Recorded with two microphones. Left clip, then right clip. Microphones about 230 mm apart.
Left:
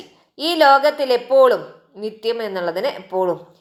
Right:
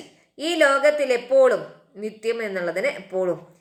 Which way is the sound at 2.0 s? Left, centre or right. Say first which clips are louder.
Left 3 dB; left.